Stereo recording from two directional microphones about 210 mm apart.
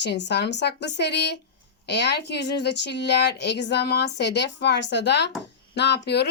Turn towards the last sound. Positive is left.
turn(degrees=55)  # may be behind; listen again after turning